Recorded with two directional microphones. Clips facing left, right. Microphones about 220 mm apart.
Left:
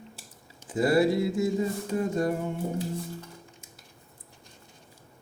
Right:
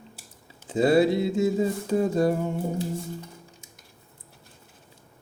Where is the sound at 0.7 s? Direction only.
25° right (ahead or behind).